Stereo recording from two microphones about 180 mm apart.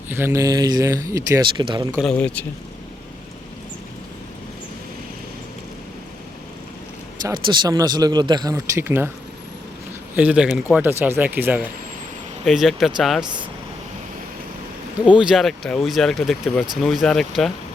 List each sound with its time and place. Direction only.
0.1 s speech: 10° right (ahead or behind)
2.0 s speech: 5° left (ahead or behind)
7.4 s speech: 25° right (ahead or behind)
10.2 s speech: 5° right (ahead or behind)
15.0 s speech: 5° right (ahead or behind)